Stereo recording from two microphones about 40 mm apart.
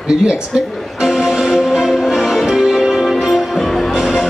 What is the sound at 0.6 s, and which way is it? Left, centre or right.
Music, centre.